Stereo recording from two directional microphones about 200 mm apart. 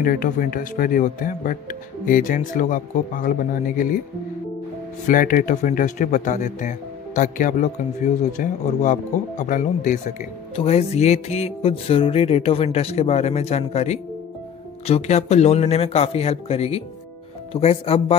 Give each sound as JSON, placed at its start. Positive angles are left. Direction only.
{"t": 0.0, "sound": "speech", "side_deg": 45}
{"t": 5.0, "sound": "speech", "side_deg": 40}